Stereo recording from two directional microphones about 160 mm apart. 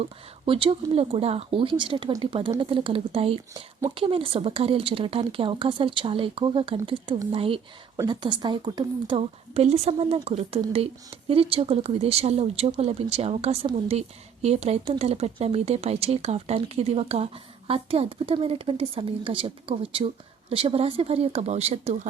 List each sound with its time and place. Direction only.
0.0 s a woman's voice: 35° right (ahead or behind)